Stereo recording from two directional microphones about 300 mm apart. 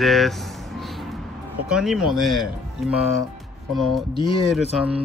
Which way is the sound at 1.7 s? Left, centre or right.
Centre.